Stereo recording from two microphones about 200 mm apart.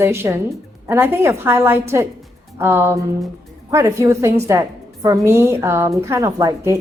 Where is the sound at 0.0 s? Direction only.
10° right (ahead or behind).